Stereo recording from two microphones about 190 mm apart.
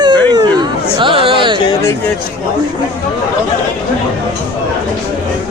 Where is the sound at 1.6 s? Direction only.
15° left (ahead or behind).